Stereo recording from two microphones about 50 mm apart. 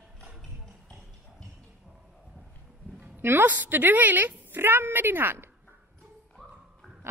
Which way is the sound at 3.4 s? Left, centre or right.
Right.